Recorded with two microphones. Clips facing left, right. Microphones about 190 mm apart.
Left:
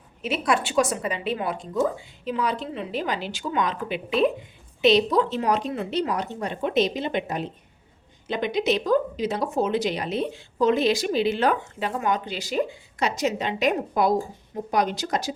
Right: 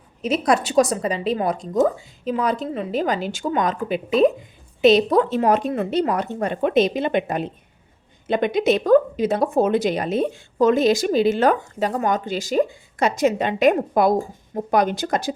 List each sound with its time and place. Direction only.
0.2 s speech: 40° right (ahead or behind)